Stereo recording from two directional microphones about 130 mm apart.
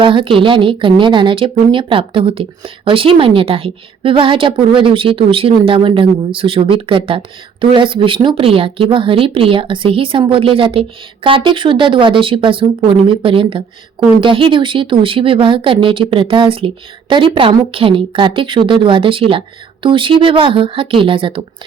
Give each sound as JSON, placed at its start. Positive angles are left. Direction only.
{"t": 0.0, "sound": "speech", "side_deg": -40}